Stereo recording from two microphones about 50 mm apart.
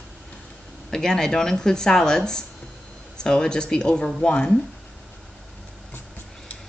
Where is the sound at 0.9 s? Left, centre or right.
Centre.